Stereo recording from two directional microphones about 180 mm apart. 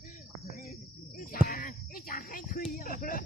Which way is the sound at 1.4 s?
55° left (ahead or behind).